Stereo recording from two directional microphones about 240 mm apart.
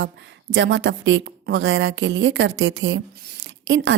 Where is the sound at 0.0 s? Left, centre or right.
Right.